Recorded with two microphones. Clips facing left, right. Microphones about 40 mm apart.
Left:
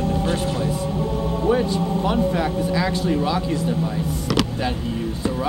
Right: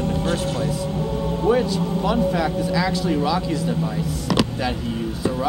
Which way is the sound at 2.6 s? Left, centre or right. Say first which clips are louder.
Even; left.